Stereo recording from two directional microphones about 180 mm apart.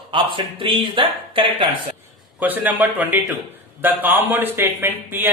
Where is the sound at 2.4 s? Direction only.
10° right (ahead or behind).